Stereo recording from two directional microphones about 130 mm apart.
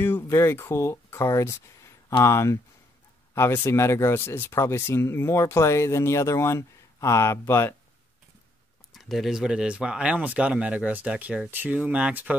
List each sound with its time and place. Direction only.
0.0 s speech: 20° left (ahead or behind)
8.9 s speech: centre (ahead or behind)